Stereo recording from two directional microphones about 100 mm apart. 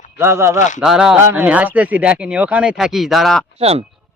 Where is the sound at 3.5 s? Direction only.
90° right.